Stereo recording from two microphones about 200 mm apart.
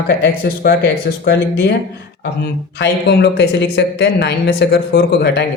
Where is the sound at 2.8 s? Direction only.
60° left (ahead or behind).